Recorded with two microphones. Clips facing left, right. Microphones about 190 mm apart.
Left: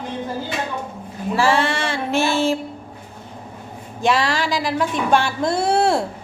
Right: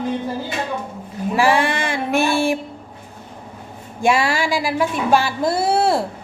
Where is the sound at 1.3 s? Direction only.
15° right (ahead or behind).